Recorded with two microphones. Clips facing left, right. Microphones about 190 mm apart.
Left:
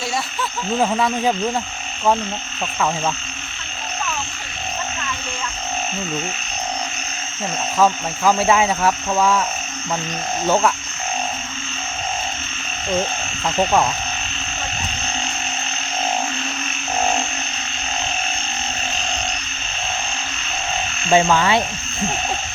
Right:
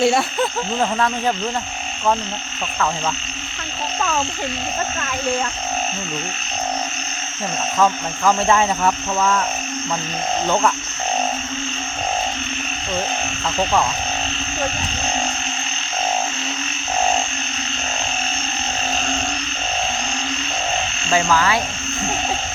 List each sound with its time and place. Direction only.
0.0 s hoot: 60° right (ahead or behind)
0.8 s speech: 10° left (ahead or behind)
7.8 s speech: 5° left (ahead or behind)
21.1 s speech: 20° left (ahead or behind)